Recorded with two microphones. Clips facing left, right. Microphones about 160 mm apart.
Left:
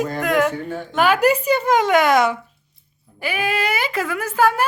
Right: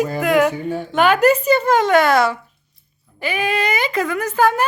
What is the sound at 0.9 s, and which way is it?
A woman's voice, 5° left (ahead or behind).